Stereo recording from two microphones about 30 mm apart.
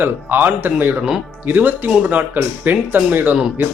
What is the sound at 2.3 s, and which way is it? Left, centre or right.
Speech, right.